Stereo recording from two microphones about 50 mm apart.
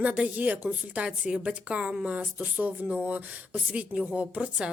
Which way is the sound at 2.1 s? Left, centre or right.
Right.